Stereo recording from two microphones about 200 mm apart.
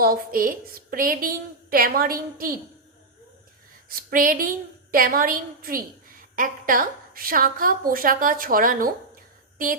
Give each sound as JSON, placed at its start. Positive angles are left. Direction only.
{"t": 0.0, "sound": "a woman's voice", "side_deg": -45}
{"t": 3.8, "sound": "a woman's voice", "side_deg": -45}